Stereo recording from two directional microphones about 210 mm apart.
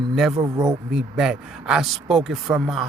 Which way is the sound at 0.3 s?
15° right (ahead or behind).